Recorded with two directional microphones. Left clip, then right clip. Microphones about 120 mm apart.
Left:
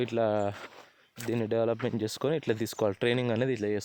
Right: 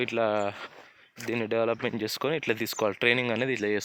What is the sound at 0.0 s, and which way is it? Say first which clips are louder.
Speech: right 1 dB; 65° left (ahead or behind).